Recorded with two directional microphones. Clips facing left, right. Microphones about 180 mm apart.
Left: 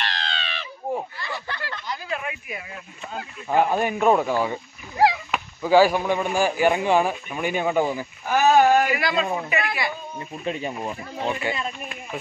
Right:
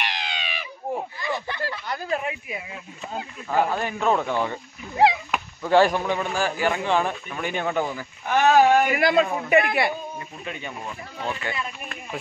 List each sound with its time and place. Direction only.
0.0 s a sound: 15° right (ahead or behind)
2.0 s speech: 30° right (ahead or behind)
3.4 s speech: 15° left (ahead or behind)
4.9 s speech: 20° right (ahead or behind)
5.3 s speech: 5° left (ahead or behind)
8.9 s speech: 50° right (ahead or behind)
10.4 s speech: 30° left (ahead or behind)